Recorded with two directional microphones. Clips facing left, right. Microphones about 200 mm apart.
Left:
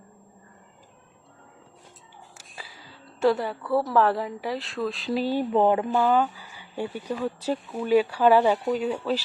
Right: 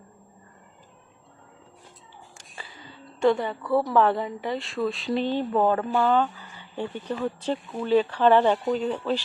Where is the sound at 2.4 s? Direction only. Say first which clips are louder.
Right 1 dB; 5° left (ahead or behind).